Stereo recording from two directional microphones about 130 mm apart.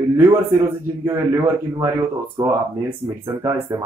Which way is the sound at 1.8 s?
25° right (ahead or behind).